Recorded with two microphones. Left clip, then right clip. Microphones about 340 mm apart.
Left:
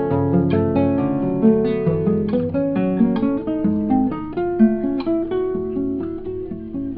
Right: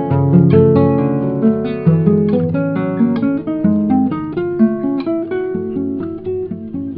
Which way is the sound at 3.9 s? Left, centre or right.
Right.